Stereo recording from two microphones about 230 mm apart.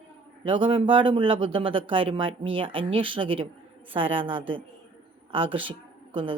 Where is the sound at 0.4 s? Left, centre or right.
Right.